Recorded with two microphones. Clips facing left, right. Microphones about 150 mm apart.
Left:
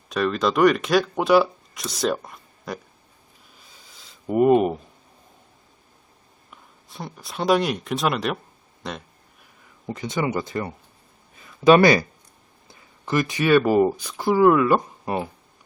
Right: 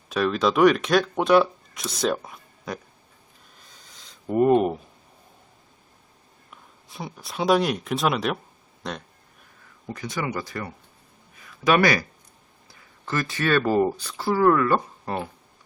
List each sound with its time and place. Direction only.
0.1 s speech: centre (ahead or behind)
3.6 s a sound: 5° left (ahead or behind)
6.5 s speech: centre (ahead or behind)
9.8 s speech: 20° left (ahead or behind)
12.6 s speech: 15° left (ahead or behind)